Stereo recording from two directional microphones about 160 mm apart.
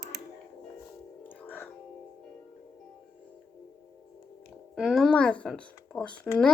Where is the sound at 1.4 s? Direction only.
10° left (ahead or behind).